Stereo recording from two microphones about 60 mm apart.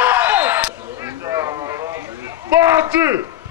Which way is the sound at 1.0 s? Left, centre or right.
Right.